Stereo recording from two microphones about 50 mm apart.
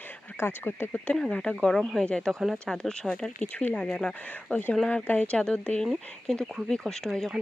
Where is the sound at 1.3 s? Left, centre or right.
Left.